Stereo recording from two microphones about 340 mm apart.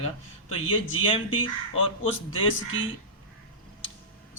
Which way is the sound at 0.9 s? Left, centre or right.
Centre.